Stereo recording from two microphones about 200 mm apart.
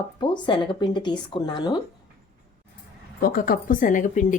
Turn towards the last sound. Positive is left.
turn(degrees=40)  # may be behind; listen again after turning